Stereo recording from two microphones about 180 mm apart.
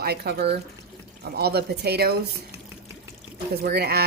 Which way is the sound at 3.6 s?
60° right (ahead or behind).